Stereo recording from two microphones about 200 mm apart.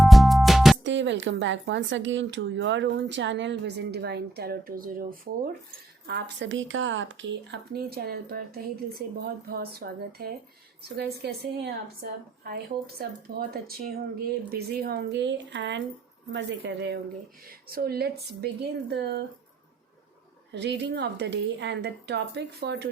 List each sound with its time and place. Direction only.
0.0 s music: centre (ahead or behind)
0.9 s speech: 65° right (ahead or behind); by 5.5 s 45° right (ahead or behind)
6.1 s speech: 60° right (ahead or behind)
13.5 s speech: 50° right (ahead or behind)
20.5 s speech: 60° right (ahead or behind)